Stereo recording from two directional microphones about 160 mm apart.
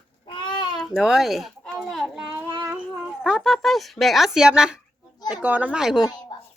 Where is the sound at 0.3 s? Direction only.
30° left (ahead or behind).